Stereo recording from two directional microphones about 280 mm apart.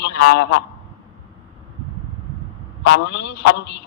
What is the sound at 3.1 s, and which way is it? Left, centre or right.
Speech, left.